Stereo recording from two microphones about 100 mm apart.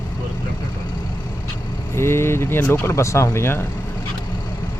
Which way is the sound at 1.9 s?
25° left (ahead or behind).